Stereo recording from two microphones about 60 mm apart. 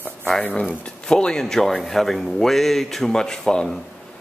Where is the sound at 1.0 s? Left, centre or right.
Centre.